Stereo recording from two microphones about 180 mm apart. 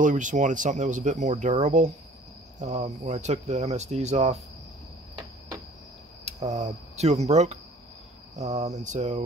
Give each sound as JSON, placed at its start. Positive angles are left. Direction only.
{"t": 0.0, "sound": "speech", "side_deg": -45}
{"t": 6.2, "sound": "speech", "side_deg": -40}